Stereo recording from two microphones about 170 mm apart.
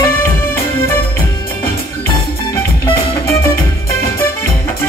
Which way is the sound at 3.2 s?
15° left (ahead or behind).